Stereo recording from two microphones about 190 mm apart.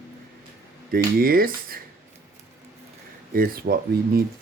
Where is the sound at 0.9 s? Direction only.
50° right (ahead or behind).